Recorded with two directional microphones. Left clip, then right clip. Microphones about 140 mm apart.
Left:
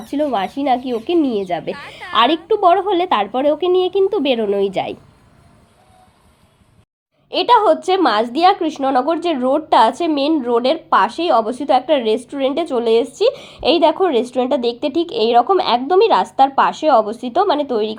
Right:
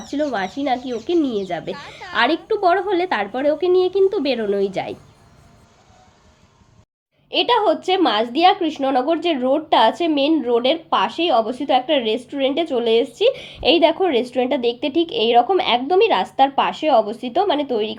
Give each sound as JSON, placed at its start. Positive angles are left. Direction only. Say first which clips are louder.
{"t": 0.1, "sound": "speech", "louder": "left 4 dB", "side_deg": 40}
{"t": 1.7, "sound": "a woman's voice", "louder": "left 2 dB", "side_deg": 5}
{"t": 2.1, "sound": "speech", "louder": "left 4 dB", "side_deg": 40}
{"t": 7.3, "sound": "speech", "louder": "left 4 dB", "side_deg": 35}